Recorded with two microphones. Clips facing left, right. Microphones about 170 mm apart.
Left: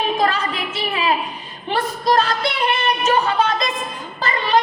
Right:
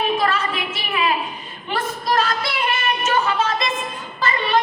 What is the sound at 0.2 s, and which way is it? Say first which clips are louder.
Speech: left 1 dB; 30° left (ahead or behind).